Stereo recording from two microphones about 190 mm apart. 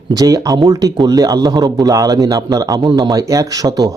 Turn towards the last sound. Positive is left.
turn(degrees=-20)  # may be behind; listen again after turning